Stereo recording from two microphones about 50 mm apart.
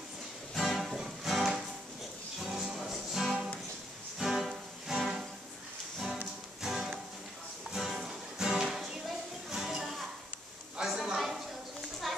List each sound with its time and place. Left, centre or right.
0.6 s music: centre
6.6 s music: centre
10.8 s a sound: centre